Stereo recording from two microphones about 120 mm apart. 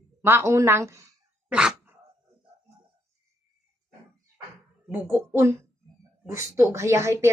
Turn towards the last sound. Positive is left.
turn(degrees=-20)  # may be behind; listen again after turning